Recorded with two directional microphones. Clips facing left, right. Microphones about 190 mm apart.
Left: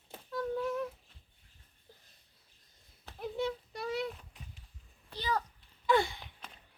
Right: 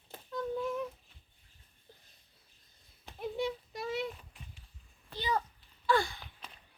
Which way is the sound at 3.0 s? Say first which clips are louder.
Right 1 dB; 15° right (ahead or behind).